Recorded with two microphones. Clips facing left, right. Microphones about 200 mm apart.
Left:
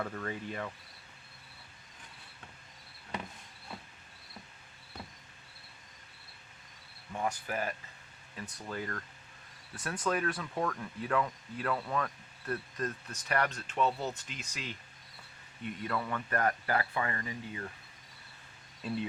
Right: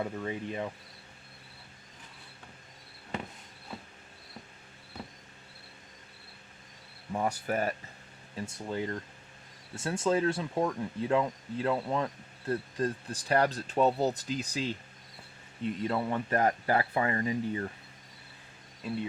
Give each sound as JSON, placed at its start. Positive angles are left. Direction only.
{"t": 0.0, "sound": "speech", "side_deg": -15}
{"t": 7.1, "sound": "speech", "side_deg": -40}
{"t": 8.4, "sound": "speech", "side_deg": -25}